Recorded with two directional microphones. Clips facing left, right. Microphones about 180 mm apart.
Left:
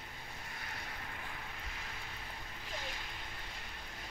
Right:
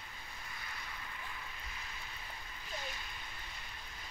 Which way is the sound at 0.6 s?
65° left (ahead or behind).